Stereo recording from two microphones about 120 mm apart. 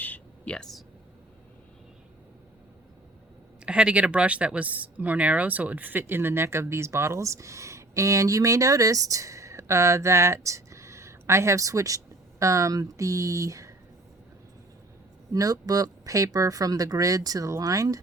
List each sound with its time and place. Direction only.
0.0 s whispering: 10° left (ahead or behind)
3.7 s speech: 10° right (ahead or behind); by 13.7 s 25° right (ahead or behind)
15.3 s speech: 30° right (ahead or behind)